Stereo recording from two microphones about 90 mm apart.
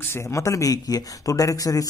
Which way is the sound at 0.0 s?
30° left (ahead or behind).